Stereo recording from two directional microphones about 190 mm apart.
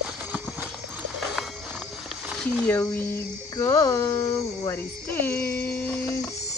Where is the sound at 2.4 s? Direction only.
10° left (ahead or behind).